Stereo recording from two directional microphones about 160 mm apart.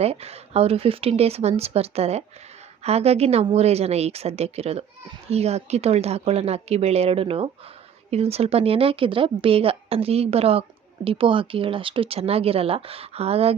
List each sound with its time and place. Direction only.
0.0 s speech: 40° right (ahead or behind)